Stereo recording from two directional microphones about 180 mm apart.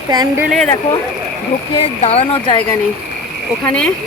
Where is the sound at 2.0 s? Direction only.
35° left (ahead or behind).